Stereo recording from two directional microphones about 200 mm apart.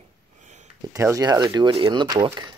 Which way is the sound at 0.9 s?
15° right (ahead or behind).